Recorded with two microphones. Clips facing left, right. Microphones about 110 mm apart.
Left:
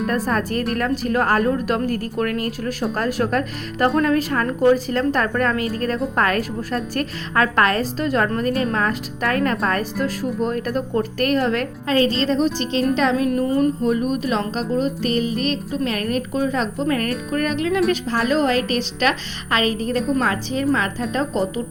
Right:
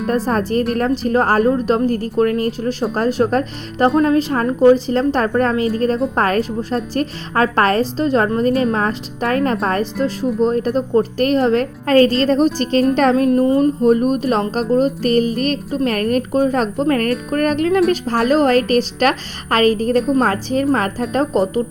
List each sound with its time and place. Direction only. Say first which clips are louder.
0.1 s a woman's voice: right 8 dB; 35° right (ahead or behind)
11.9 s a woman's voice: right 6 dB; 45° right (ahead or behind)
13.1 s a woman's voice: right 5 dB; 35° right (ahead or behind)